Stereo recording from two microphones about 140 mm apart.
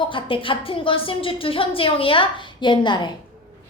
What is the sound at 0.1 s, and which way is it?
A woman's voice, 40° left (ahead or behind).